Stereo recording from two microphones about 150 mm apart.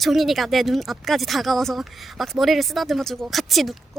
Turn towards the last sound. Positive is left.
turn(degrees=0)  # may be behind; listen again after turning